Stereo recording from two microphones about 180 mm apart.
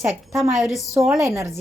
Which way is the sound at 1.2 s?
15° right (ahead or behind).